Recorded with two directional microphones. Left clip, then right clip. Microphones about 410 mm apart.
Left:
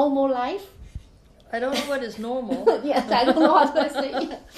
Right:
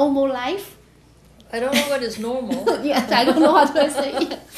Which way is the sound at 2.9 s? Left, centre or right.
Left.